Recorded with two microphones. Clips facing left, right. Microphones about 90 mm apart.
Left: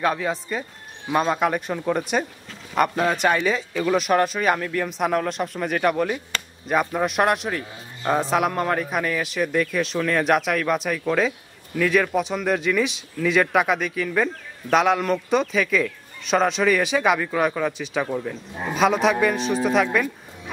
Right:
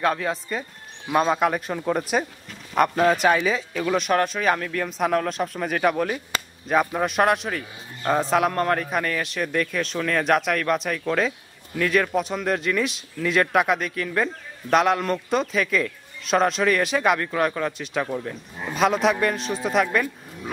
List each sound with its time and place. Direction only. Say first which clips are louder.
0.0 s speech: even; centre (ahead or behind)